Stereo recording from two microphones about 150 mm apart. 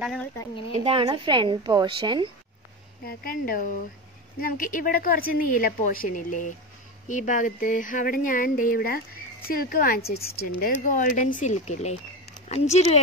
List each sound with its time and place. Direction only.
0.8 s a woman's voice: 35° right (ahead or behind)
3.1 s speech: 70° left (ahead or behind)
10.8 s speech: 60° left (ahead or behind)